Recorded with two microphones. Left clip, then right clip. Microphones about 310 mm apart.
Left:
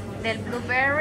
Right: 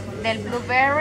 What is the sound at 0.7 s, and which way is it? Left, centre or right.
Speech, centre.